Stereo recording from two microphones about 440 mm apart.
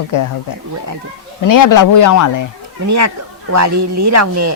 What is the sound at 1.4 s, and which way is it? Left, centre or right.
A man's voice, left.